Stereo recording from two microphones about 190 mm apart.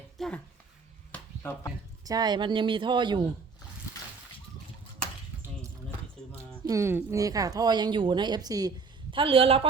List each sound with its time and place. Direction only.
0.2 s a woman's voice: centre (ahead or behind)
1.1 s chop: 10° left (ahead or behind)
2.0 s a woman's voice: 20° right (ahead or behind)
6.7 s a woman's voice: 15° right (ahead or behind)